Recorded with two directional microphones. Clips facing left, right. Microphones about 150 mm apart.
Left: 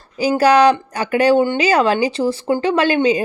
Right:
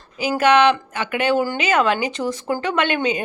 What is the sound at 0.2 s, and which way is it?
Speech, 35° left (ahead or behind).